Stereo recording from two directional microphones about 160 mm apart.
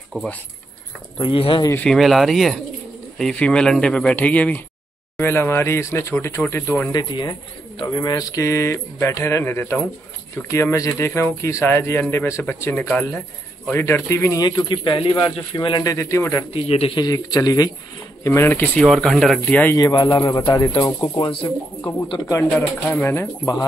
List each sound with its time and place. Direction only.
0.1 s speech: 5° left (ahead or behind)
1.1 s speech: 35° left (ahead or behind)
1.7 s speech: 5° left (ahead or behind)
6.9 s speech: 30° left (ahead or behind)
14.4 s speech: 30° left (ahead or behind)
16.6 s speech: 40° left (ahead or behind); by 19.8 s 10° left (ahead or behind)
19.8 s speech: 25° left (ahead or behind)
22.3 s speech: 15° left (ahead or behind)